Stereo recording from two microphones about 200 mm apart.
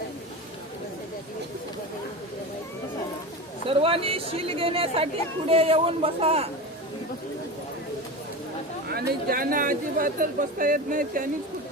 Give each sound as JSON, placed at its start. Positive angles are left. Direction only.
{"t": 3.7, "sound": "speech", "side_deg": -25}
{"t": 8.9, "sound": "speech", "side_deg": -50}